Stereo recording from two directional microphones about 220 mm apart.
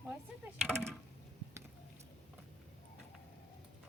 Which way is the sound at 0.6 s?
5° left (ahead or behind).